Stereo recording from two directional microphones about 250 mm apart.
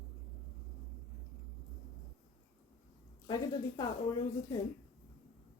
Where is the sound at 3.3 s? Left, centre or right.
Centre.